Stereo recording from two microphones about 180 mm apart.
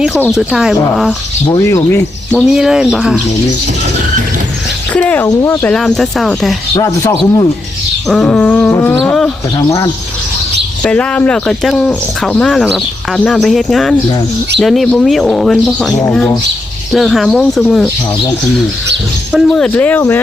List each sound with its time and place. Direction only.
0.3 s speech: centre (ahead or behind)
1.5 s speech: 15° left (ahead or behind)
2.4 s speech: 5° right (ahead or behind)
4.9 s speech: 10° left (ahead or behind)
5.7 s speech: centre (ahead or behind)
6.7 s speech: 20° left (ahead or behind)
8.0 s speech: 5° left (ahead or behind)
9.6 s speech: 20° left (ahead or behind)
10.8 s speech: 5° left (ahead or behind)
19.3 s speech: centre (ahead or behind)